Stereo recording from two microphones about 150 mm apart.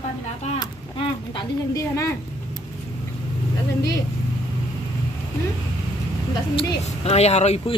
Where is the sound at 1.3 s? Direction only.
20° left (ahead or behind).